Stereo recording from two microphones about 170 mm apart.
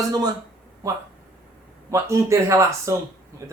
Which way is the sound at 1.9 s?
15° right (ahead or behind).